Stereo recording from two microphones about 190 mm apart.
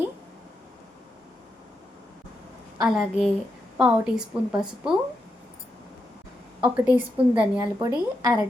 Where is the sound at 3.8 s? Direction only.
5° right (ahead or behind).